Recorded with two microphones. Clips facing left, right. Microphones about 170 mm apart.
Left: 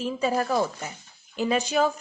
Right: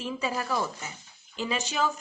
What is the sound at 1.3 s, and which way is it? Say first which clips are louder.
Speech: left 7 dB; 55° left (ahead or behind).